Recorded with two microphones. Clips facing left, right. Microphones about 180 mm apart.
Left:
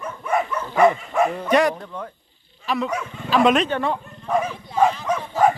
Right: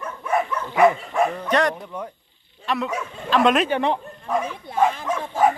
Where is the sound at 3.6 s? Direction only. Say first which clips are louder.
Right 2 dB; 15° right (ahead or behind).